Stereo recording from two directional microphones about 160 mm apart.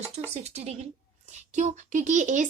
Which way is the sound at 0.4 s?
45° right (ahead or behind).